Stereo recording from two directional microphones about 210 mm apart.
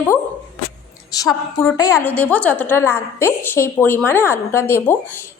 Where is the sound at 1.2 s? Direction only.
15° left (ahead or behind).